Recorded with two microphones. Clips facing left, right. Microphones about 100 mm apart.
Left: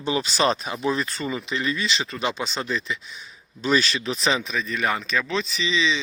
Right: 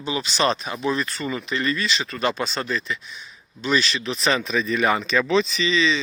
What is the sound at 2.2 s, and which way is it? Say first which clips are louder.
Speech: right 5 dB; 10° left (ahead or behind).